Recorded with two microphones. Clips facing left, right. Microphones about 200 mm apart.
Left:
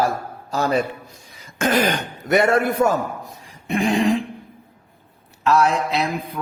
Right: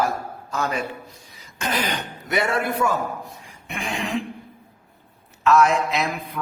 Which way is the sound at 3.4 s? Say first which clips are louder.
Left 11 dB; 35° left (ahead or behind).